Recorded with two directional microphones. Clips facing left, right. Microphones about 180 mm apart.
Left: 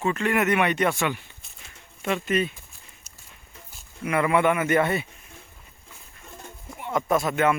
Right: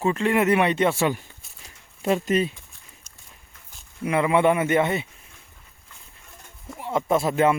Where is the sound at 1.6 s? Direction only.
35° right (ahead or behind).